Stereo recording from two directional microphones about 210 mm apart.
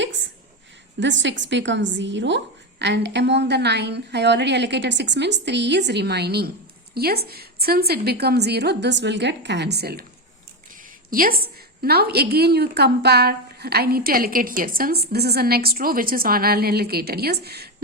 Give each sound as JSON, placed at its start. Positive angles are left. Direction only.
{"t": 0.9, "sound": "a woman's voice", "side_deg": -60}
{"t": 11.1, "sound": "a woman's voice", "side_deg": -45}